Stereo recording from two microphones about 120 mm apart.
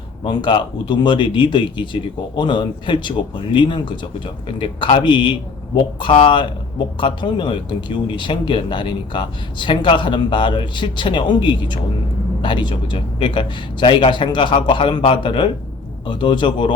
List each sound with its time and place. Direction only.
0.3 s a man's voice: 40° left (ahead or behind)